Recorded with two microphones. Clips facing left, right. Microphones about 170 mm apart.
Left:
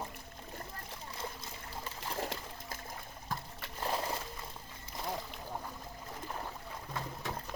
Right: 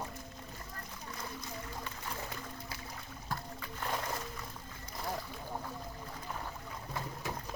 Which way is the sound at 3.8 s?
30° left (ahead or behind).